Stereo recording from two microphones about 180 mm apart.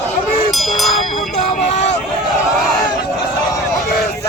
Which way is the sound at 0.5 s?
Centre (ahead or behind).